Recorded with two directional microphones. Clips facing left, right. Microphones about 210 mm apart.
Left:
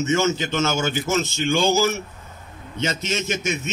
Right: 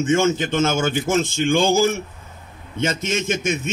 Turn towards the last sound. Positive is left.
turn(degrees=-50)  # may be behind; listen again after turning